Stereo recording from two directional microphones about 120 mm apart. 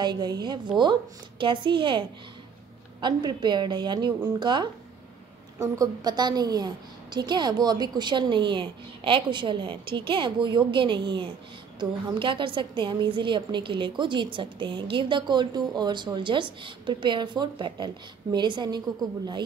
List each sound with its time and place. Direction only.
0.0 s a woman's voice: 35° right (ahead or behind)